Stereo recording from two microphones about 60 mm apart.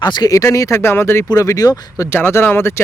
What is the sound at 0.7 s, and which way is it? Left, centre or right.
Speech, left.